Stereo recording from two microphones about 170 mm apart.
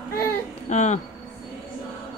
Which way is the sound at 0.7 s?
45° left (ahead or behind).